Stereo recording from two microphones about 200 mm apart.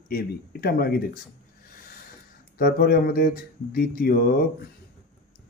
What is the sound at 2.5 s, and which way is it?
Speech, 45° left (ahead or behind).